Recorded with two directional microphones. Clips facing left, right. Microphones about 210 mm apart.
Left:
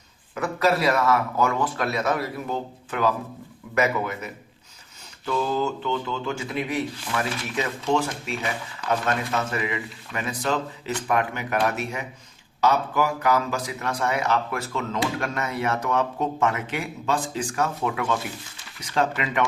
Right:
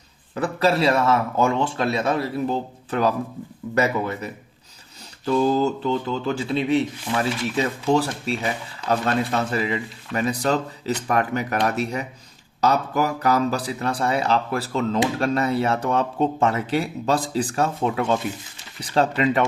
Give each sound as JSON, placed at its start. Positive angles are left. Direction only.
{"t": 0.3, "sound": "speech", "side_deg": -30}